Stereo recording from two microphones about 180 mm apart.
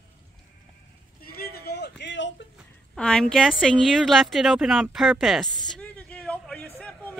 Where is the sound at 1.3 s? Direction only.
60° left (ahead or behind); by 2.3 s 80° left.